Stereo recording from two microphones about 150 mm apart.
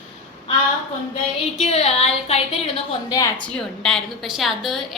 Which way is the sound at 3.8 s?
5° left (ahead or behind).